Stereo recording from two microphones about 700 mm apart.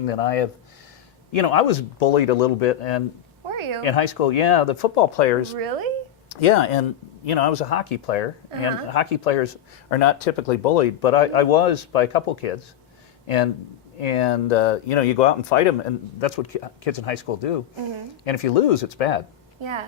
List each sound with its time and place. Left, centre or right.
0.0 s speech: left
3.5 s a sound: right
3.8 s speech: left
5.5 s speech: right
6.4 s speech: left
9.9 s speech: left
14.0 s speech: left
19.6 s a woman's voice: right